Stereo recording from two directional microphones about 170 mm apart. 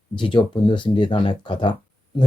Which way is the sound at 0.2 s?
30° left (ahead or behind).